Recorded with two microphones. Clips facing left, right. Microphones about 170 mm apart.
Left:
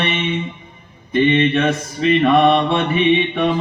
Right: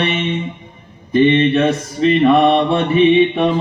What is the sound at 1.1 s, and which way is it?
Mantra, 35° right (ahead or behind).